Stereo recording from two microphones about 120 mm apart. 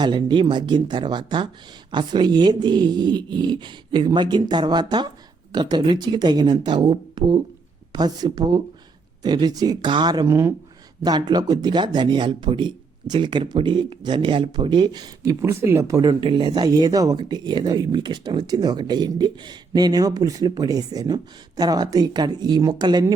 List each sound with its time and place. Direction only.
0.0 s speech: 40° right (ahead or behind)
10.2 s speech: 25° right (ahead or behind)
11.0 s speech: 35° right (ahead or behind)